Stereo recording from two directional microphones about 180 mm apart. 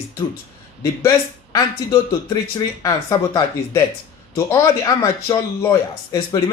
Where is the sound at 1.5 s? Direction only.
20° left (ahead or behind).